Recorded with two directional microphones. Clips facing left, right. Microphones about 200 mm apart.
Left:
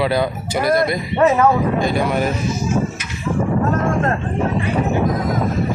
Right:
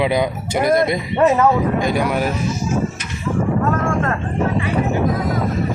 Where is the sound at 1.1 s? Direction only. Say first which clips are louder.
Even; 5° left (ahead or behind).